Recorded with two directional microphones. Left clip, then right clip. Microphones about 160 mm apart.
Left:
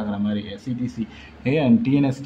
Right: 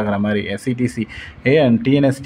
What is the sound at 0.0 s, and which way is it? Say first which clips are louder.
Speech: right 8 dB; 35° right (ahead or behind).